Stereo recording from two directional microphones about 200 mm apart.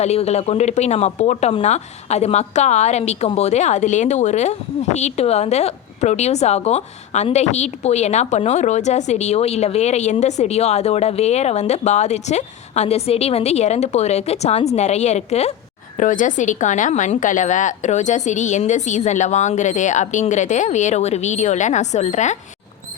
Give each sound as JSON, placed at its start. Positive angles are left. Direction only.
{"t": 0.0, "sound": "speech", "side_deg": 35}